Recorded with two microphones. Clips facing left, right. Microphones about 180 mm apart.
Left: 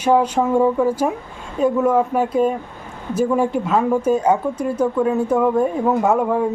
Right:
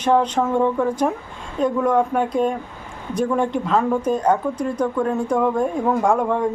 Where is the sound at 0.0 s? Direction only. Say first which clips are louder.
Left 2 dB; 10° left (ahead or behind).